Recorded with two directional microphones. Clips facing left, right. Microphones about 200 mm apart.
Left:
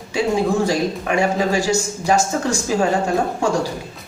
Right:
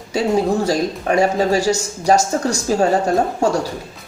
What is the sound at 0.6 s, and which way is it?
Speech, 40° right (ahead or behind).